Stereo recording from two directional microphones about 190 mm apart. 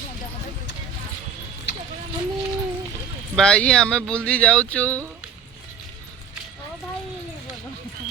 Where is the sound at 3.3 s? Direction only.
5° left (ahead or behind).